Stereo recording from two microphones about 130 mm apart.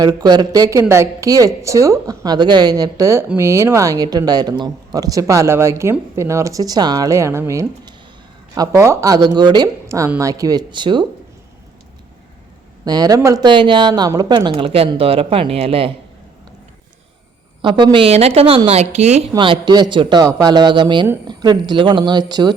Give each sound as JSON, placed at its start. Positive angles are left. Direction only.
{"t": 0.0, "sound": "speech", "side_deg": -30}
{"t": 12.8, "sound": "speech", "side_deg": -30}
{"t": 17.6, "sound": "a woman's voice", "side_deg": -40}
{"t": 19.4, "sound": "speech", "side_deg": -35}